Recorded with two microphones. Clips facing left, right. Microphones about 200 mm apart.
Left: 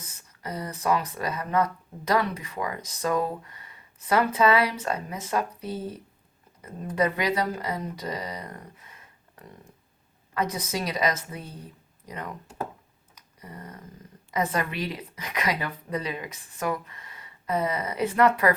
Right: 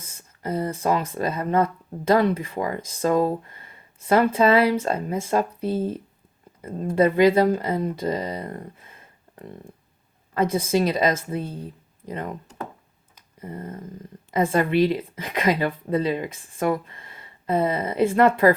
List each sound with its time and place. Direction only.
0.0 s speech: 30° right (ahead or behind)
13.1 s a sound: 30° right (ahead or behind)
14.3 s speech: 30° right (ahead or behind)